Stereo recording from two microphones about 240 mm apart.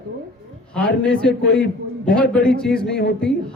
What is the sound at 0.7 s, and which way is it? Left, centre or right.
A man's voice, centre.